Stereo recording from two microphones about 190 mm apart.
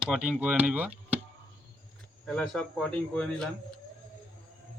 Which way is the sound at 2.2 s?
Centre (ahead or behind).